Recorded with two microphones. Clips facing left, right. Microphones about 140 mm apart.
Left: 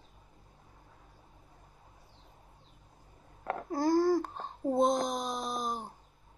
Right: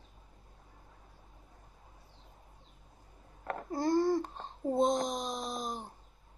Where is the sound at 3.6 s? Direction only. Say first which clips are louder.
Left 2 dB; centre (ahead or behind).